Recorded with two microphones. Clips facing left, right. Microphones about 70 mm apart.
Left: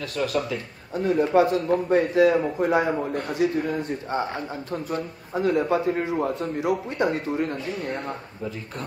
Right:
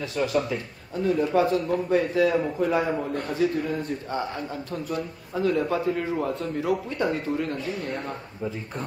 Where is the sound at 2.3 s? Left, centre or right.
Centre.